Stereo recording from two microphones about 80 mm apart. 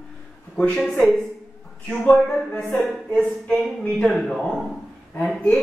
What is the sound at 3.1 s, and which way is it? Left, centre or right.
Speech, centre.